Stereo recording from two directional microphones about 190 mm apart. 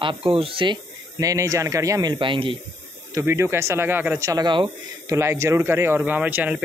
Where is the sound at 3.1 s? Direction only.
15° right (ahead or behind).